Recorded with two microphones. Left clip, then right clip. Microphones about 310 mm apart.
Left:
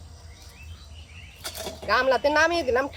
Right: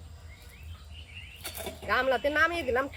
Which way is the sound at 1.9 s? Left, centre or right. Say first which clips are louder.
Left 6 dB; centre.